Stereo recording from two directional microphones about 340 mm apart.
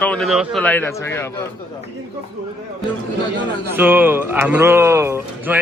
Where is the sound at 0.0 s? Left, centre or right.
Centre.